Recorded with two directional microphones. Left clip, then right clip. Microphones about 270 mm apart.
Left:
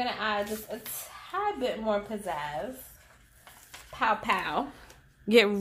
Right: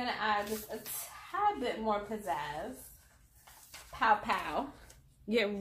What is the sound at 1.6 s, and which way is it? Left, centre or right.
Speech, left.